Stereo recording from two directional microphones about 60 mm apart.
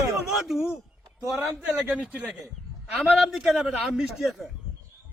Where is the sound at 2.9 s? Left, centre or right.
Centre.